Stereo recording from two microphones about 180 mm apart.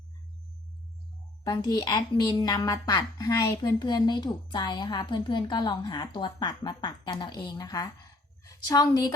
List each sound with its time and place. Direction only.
1.5 s a woman's voice: 25° left (ahead or behind)